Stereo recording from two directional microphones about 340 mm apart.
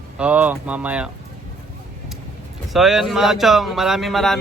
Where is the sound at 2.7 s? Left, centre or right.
Centre.